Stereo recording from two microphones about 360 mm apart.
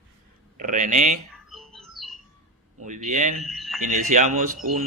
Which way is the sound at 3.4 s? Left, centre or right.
Centre.